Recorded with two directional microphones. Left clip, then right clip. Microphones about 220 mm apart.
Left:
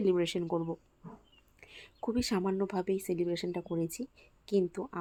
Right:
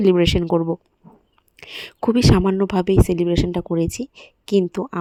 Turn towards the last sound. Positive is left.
turn(degrees=-35)  # may be behind; listen again after turning